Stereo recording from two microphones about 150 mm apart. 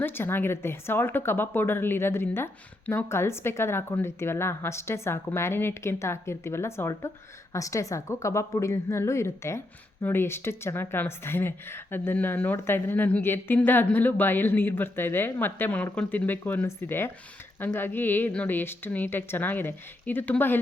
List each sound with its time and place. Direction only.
0.0 s a woman's voice: 15° left (ahead or behind)